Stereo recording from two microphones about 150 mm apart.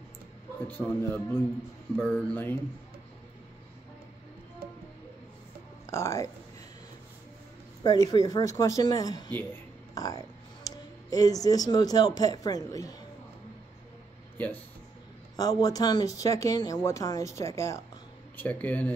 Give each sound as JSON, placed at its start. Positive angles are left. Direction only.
{"t": 0.7, "sound": "speech", "side_deg": 15}
{"t": 5.9, "sound": "speech", "side_deg": 20}
{"t": 7.8, "sound": "speech", "side_deg": 25}
{"t": 14.3, "sound": "a sound", "side_deg": 10}
{"t": 15.3, "sound": "speech", "side_deg": 25}